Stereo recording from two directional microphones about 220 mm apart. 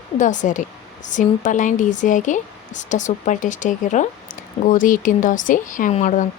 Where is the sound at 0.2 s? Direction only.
35° left (ahead or behind).